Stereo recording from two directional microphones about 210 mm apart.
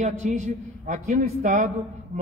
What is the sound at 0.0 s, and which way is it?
A man's voice, 35° right (ahead or behind).